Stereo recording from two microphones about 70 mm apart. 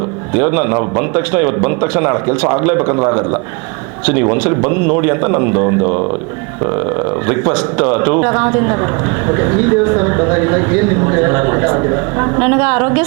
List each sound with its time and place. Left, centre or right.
0.3 s speech: right
7.3 s speech: right